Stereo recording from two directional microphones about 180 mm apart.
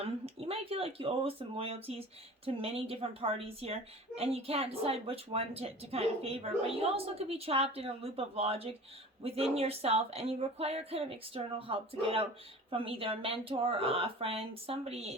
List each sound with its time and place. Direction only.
0.0 s speech: 35° right (ahead or behind)